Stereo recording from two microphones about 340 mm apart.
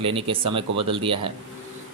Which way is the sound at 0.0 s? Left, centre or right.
Centre.